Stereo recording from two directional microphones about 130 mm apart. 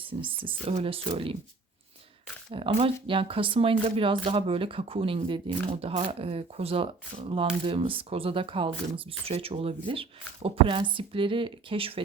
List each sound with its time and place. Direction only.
0.0 s speech: 40° right (ahead or behind)
2.5 s speech: 45° right (ahead or behind)